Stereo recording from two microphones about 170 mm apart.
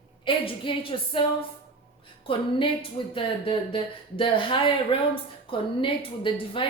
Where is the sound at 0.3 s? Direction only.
30° left (ahead or behind).